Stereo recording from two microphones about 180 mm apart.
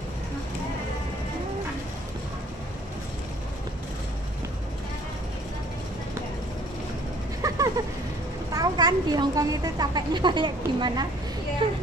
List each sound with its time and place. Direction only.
7.4 s vehicle: 20° right (ahead or behind)
8.5 s a woman's voice: 20° right (ahead or behind)